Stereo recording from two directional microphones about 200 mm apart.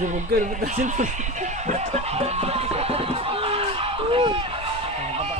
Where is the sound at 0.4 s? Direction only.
40° right (ahead or behind).